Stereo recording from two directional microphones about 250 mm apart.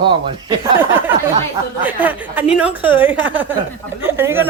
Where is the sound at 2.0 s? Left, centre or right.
Centre.